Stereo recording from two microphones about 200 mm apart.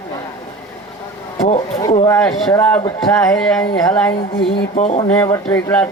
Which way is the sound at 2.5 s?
10° left (ahead or behind).